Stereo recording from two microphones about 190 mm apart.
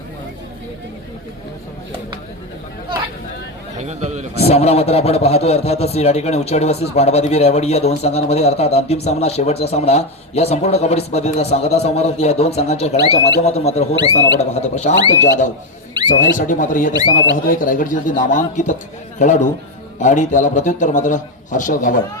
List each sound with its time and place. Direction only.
3.8 s a man's voice: 35° right (ahead or behind)
4.4 s speech: 35° left (ahead or behind)
16.0 s a sound: 25° right (ahead or behind)
16.5 s speech: 45° left (ahead or behind)